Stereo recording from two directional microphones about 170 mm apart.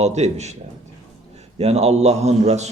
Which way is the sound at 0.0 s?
40° right (ahead or behind).